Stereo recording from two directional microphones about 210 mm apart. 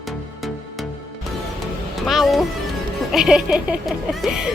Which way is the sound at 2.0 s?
Centre (ahead or behind).